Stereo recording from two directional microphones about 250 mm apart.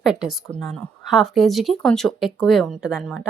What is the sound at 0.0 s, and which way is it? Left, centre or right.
Speech, centre.